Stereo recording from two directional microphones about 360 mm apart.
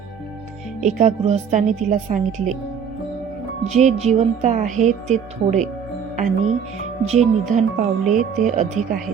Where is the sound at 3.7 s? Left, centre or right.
Centre.